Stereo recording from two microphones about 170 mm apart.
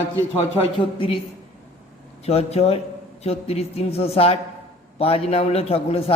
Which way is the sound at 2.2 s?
40° left (ahead or behind).